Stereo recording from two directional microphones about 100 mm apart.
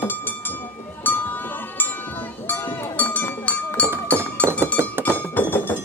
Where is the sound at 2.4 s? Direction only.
20° left (ahead or behind).